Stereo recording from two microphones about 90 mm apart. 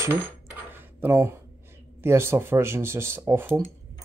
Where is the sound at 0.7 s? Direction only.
30° right (ahead or behind).